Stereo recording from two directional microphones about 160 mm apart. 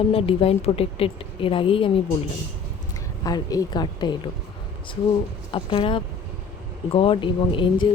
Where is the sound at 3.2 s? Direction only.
25° left (ahead or behind).